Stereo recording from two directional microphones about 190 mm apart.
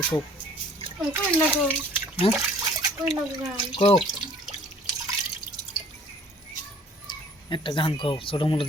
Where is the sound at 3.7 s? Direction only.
30° left (ahead or behind).